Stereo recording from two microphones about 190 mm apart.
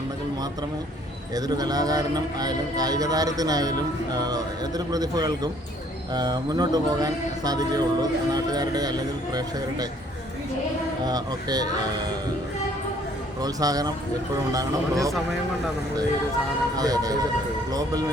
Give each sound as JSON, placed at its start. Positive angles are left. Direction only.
{"t": 1.4, "sound": "speech", "side_deg": -20}
{"t": 11.0, "sound": "speech", "side_deg": -20}
{"t": 13.4, "sound": "speech", "side_deg": -20}
{"t": 16.7, "sound": "speech", "side_deg": -20}